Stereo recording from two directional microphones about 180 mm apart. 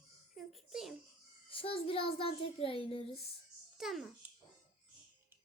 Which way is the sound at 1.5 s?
30° left (ahead or behind).